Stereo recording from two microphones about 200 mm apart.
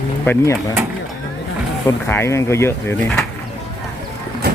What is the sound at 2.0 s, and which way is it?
Speech, 10° left (ahead or behind).